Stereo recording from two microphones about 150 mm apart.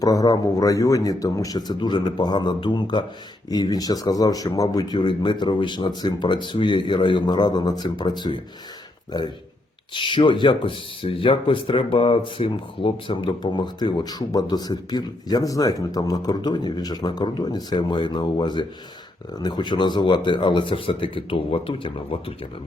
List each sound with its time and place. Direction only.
0.0 s speech: 25° left (ahead or behind)
9.9 s speech: 30° left (ahead or behind)